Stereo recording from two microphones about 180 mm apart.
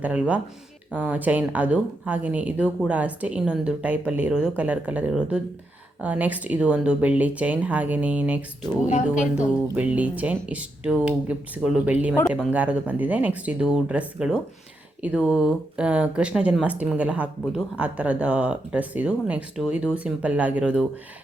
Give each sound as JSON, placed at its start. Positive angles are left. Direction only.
{"t": 0.0, "sound": "speech", "side_deg": -10}
{"t": 8.9, "sound": "a woman's voice", "side_deg": 40}
{"t": 9.7, "sound": "speech", "side_deg": -10}